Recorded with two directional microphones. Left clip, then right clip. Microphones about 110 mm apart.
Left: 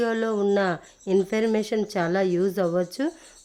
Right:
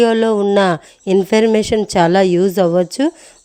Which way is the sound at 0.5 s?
90° right.